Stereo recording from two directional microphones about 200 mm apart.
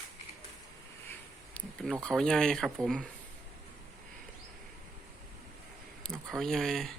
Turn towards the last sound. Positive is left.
turn(degrees=0)  # may be behind; listen again after turning